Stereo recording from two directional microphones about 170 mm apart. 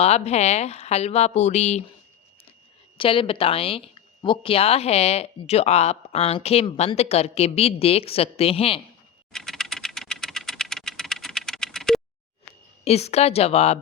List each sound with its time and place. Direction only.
0.0 s speech: 40° left (ahead or behind)
3.0 s speech: 30° left (ahead or behind)
9.3 s computer keyboard: centre (ahead or behind)
12.8 s speech: 40° left (ahead or behind)